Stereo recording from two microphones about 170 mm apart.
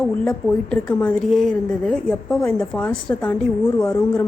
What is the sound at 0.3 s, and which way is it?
A woman's voice, 10° left (ahead or behind).